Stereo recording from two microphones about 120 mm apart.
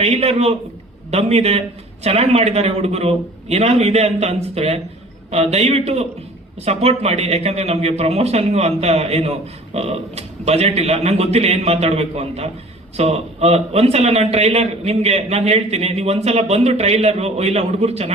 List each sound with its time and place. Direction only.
0.0 s a man's voice: 60° right (ahead or behind)